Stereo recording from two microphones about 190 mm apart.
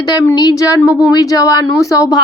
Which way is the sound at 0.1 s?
20° left (ahead or behind).